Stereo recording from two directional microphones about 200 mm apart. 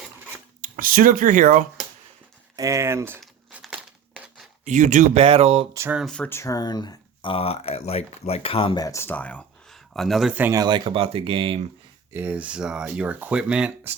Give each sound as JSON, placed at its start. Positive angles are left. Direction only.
{"t": 0.6, "sound": "speech", "side_deg": -45}
{"t": 2.6, "sound": "speech", "side_deg": -15}
{"t": 3.2, "sound": "crumpling", "side_deg": -5}
{"t": 4.6, "sound": "speech", "side_deg": -35}
{"t": 5.7, "sound": "speech", "side_deg": -10}
{"t": 12.1, "sound": "speech", "side_deg": -10}